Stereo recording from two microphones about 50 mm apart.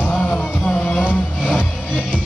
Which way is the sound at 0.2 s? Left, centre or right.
Left.